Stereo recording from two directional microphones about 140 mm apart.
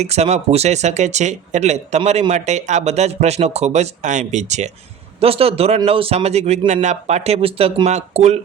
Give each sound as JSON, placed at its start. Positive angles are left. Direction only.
{"t": 0.0, "sound": "speech", "side_deg": -50}
{"t": 5.2, "sound": "speech", "side_deg": -45}